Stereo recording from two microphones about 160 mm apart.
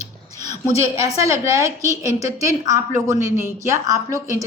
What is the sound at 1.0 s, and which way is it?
A woman's voice, 20° right (ahead or behind).